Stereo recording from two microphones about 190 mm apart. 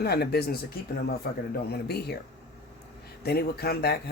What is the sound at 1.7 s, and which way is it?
Speech, 60° left (ahead or behind).